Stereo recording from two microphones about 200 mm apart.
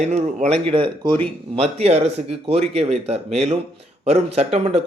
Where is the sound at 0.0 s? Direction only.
35° right (ahead or behind).